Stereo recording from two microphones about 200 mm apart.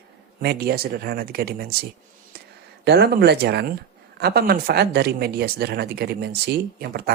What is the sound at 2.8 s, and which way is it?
Speech, 55° right (ahead or behind).